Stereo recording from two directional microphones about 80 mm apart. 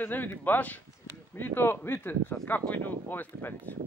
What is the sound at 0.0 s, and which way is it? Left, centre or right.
Speech, left.